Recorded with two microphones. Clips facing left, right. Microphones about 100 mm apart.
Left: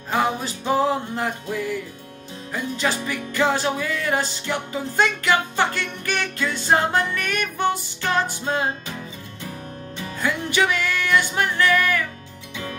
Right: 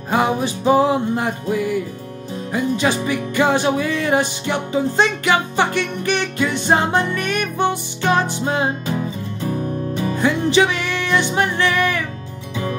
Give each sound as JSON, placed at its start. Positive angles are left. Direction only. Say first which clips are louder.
{"t": 0.1, "sound": "music", "louder": "right 4 dB", "side_deg": -15}
{"t": 10.1, "sound": "music", "louder": "right 6 dB", "side_deg": -20}